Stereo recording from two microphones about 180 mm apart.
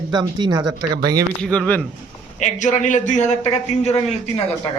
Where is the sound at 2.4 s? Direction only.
45° left (ahead or behind).